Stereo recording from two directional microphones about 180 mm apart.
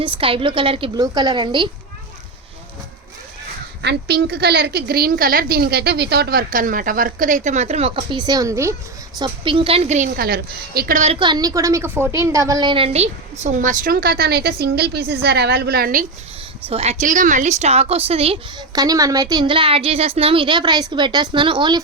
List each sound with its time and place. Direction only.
0.0 s a woman's voice: 30° right (ahead or behind)
3.8 s a woman's voice: 65° right (ahead or behind); by 10.1 s 40° right (ahead or behind)
10.2 s a woman's voice: 60° right (ahead or behind); by 11.2 s 40° right (ahead or behind)
11.2 s a woman's voice: 25° right (ahead or behind)
13.4 s a woman's voice: 45° right (ahead or behind)
16.6 s a woman's voice: 35° right (ahead or behind)
18.7 s a woman's voice: 20° right (ahead or behind)